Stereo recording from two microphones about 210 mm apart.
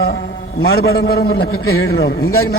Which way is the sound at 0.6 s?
50° left (ahead or behind).